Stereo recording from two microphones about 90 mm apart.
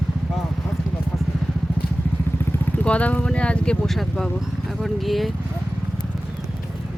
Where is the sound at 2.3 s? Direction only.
25° left (ahead or behind).